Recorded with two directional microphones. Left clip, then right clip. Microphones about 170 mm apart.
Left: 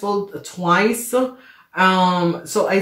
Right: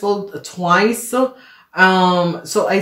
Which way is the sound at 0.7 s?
35° right (ahead or behind).